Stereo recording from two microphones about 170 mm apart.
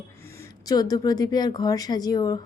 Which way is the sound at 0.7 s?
25° left (ahead or behind).